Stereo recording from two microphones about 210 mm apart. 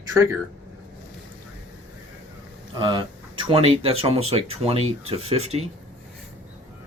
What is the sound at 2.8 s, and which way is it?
Speech, 25° right (ahead or behind).